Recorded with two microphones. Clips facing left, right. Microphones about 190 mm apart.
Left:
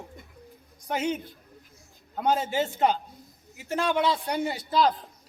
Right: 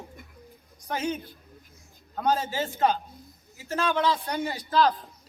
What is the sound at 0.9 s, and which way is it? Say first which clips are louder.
A man's voice: left 2 dB; 20° left (ahead or behind).